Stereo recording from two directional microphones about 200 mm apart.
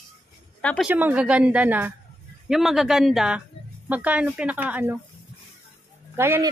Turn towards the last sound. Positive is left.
turn(degrees=-15)  # may be behind; listen again after turning